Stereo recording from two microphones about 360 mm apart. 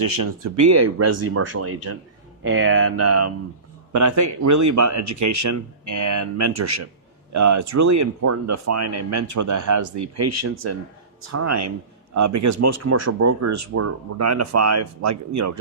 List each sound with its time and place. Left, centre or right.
0.0 s speech: right